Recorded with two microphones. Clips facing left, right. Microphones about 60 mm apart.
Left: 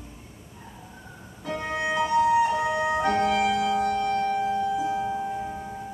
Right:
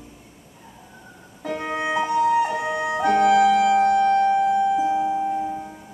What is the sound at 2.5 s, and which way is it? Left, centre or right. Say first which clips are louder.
Music: even; centre.